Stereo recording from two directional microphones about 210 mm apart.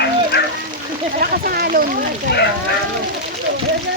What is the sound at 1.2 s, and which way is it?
Speech, 45° right (ahead or behind).